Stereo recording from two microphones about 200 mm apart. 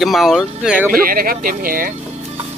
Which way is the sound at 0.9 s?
45° right (ahead or behind).